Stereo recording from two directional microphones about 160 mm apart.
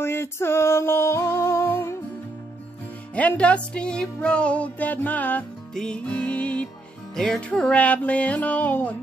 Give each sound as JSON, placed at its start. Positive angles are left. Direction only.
{"t": 0.0, "sound": "music", "side_deg": 15}
{"t": 3.2, "sound": "music", "side_deg": 10}